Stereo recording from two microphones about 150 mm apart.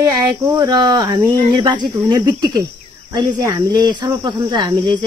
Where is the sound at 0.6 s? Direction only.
25° right (ahead or behind).